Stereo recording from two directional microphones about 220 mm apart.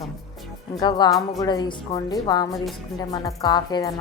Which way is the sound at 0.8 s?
20° left (ahead or behind).